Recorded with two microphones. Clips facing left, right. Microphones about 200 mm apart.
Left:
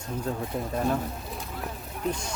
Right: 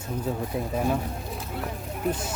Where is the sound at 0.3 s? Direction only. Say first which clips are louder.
Right 2 dB; 5° right (ahead or behind).